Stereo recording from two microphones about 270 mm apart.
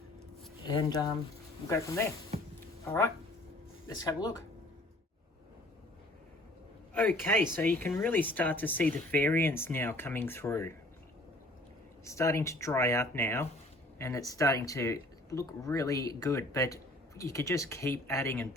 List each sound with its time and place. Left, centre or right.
0.6 s speech: centre
6.9 s speech: centre
12.0 s speech: centre